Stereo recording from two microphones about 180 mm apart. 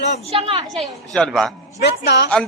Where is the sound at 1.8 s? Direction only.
65° left (ahead or behind).